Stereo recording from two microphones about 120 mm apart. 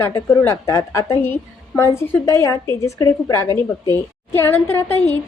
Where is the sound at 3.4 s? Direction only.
35° right (ahead or behind).